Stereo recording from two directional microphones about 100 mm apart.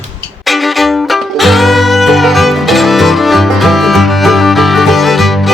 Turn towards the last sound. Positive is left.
turn(degrees=0)  # may be behind; listen again after turning